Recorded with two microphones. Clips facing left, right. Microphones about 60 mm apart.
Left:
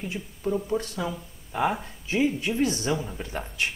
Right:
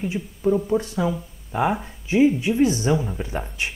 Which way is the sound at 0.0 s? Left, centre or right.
Centre.